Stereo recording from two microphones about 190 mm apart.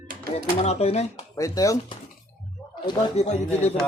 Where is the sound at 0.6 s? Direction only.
35° left (ahead or behind).